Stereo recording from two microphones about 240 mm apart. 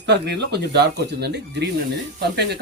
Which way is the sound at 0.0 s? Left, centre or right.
Right.